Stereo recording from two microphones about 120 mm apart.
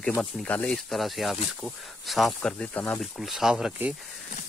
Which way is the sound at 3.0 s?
Centre (ahead or behind).